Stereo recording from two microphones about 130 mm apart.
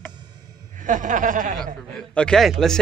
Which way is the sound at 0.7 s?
85° right.